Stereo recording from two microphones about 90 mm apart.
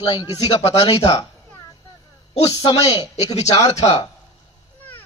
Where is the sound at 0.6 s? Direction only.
90° left.